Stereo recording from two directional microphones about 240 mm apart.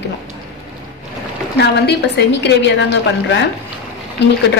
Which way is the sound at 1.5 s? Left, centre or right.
Left.